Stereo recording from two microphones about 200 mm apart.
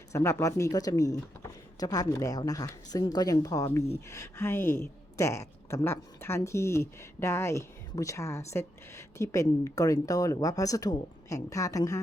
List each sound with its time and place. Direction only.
0.1 s speech: 15° left (ahead or behind)